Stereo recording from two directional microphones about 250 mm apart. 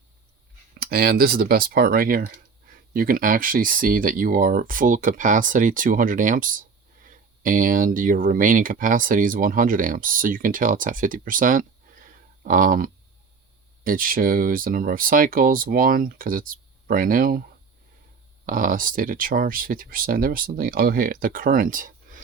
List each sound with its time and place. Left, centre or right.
0.8 s speech: right
18.4 s speech: right